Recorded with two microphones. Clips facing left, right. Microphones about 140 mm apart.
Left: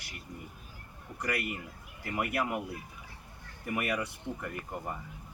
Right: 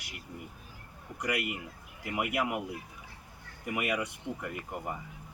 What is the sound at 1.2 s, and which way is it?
Speech, 15° right (ahead or behind).